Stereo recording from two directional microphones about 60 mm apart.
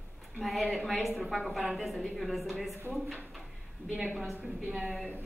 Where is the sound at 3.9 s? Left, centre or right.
Right.